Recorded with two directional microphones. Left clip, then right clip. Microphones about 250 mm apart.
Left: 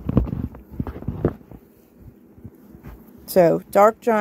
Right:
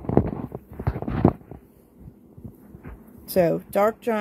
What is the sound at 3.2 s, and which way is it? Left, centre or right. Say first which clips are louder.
Speech: left 5 dB; centre.